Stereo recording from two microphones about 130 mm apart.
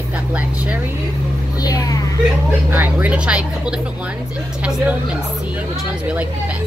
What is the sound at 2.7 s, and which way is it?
Speech, 10° right (ahead or behind).